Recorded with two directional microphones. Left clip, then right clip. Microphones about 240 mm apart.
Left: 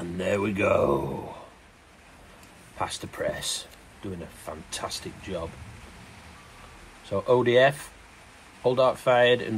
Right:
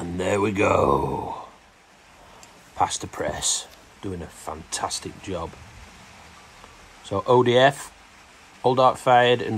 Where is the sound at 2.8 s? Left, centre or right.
Right.